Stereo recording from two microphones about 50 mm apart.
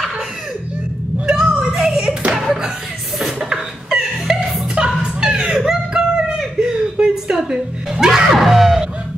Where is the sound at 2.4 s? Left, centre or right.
Centre.